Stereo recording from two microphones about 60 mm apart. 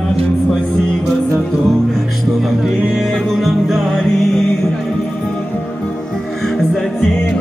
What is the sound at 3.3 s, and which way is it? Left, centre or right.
Music, centre.